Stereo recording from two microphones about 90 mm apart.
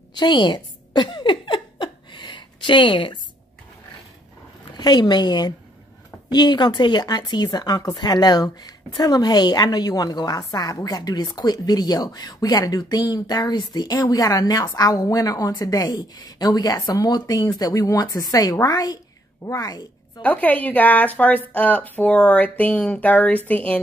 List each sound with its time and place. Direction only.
0.1 s a sound: 55° left (ahead or behind)
4.7 s speech: 50° left (ahead or behind)
20.2 s speech: 15° left (ahead or behind)